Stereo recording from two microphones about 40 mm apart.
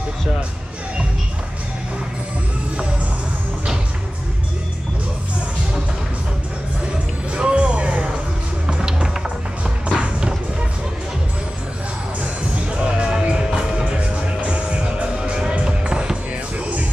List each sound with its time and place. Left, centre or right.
7.3 s music: right
12.2 s music: right